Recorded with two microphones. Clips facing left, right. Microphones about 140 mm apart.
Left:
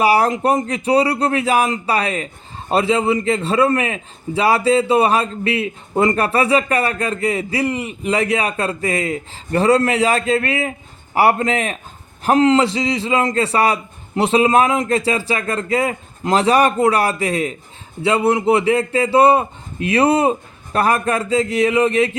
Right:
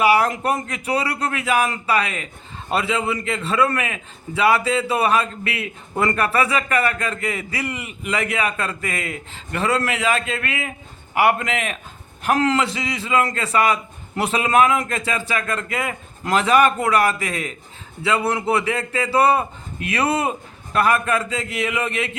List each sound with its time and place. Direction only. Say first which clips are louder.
0.0 s a man's voice: left 2 dB; 35° left (ahead or behind)
0.3 s a man's voice: left 6 dB; 25° left (ahead or behind)